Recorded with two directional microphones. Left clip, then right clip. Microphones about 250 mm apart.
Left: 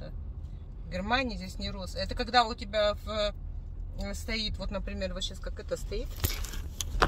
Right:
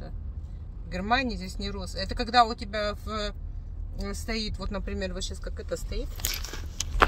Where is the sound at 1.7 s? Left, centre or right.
Centre.